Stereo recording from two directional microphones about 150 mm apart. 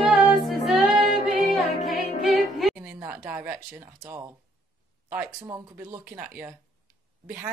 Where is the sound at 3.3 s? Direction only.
15° right (ahead or behind).